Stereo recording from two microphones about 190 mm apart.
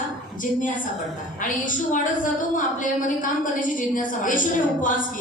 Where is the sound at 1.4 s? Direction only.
45° left (ahead or behind).